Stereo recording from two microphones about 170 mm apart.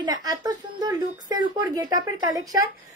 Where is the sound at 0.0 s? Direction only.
25° right (ahead or behind).